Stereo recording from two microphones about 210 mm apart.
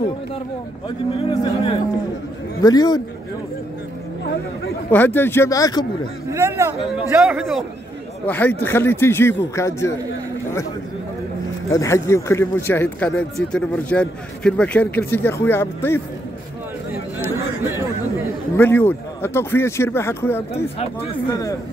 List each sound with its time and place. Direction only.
0.8 s speech: 20° left (ahead or behind)
4.9 s speech: 10° left (ahead or behind)
6.3 s a man's voice: 10° right (ahead or behind)
7.2 s a man's voice: centre (ahead or behind); by 9.9 s 15° left (ahead or behind)
11.7 s speech: 15° left (ahead or behind)
17.2 s chatter: 10° right (ahead or behind)
18.6 s speech: 10° left (ahead or behind)